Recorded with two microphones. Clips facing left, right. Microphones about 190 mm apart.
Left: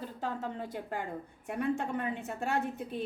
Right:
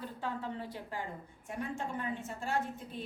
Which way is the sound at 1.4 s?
65° left (ahead or behind).